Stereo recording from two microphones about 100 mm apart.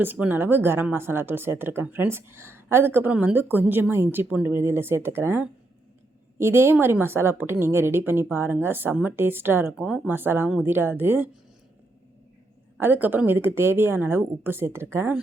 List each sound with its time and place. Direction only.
0.0 s speech: 20° right (ahead or behind)
12.8 s speech: 20° right (ahead or behind)